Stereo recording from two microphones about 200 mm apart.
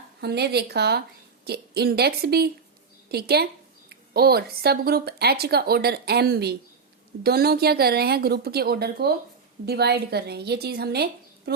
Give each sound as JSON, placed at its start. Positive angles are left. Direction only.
{"t": 0.2, "sound": "speech", "side_deg": -55}